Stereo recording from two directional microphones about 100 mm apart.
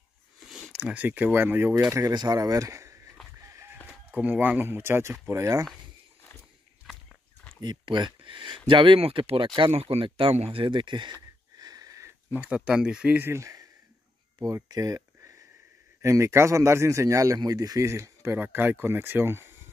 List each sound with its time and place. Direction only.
0.4 s speech: 5° right (ahead or behind); by 2.1 s 30° right (ahead or behind)
2.1 s speech: 40° right (ahead or behind)
3.3 s chicken: 30° right (ahead or behind)
4.1 s a man's voice: 15° right (ahead or behind); by 5.7 s 30° right (ahead or behind)
7.6 s speech: 50° right (ahead or behind); by 9.5 s 65° right (ahead or behind)
9.6 s speech: 80° right
10.0 s a sound: 65° right (ahead or behind); by 12.1 s 35° right (ahead or behind)
12.3 s speech: 15° right (ahead or behind)
13.2 s a man's voice: 30° right (ahead or behind)